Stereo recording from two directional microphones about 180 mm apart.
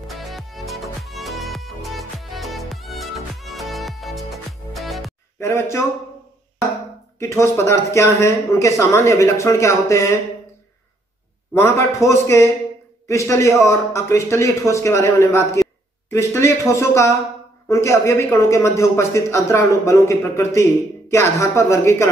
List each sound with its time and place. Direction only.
0.1 s music: centre (ahead or behind)
5.4 s speech: 15° left (ahead or behind)
7.2 s a man's voice: 15° left (ahead or behind)
11.5 s a man's voice: 15° left (ahead or behind)